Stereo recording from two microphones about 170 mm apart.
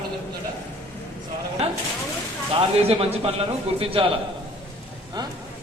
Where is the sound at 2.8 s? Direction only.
35° right (ahead or behind).